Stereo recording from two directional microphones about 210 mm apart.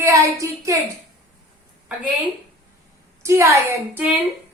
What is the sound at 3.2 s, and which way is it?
Speech, 15° right (ahead or behind).